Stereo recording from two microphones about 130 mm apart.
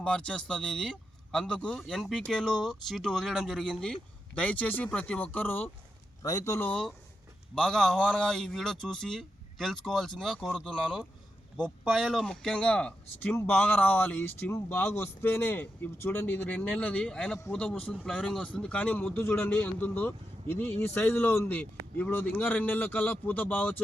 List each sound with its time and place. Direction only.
0.0 s speech: 5° left (ahead or behind)
6.2 s speech: 25° left (ahead or behind)
6.7 s speech: 5° left (ahead or behind)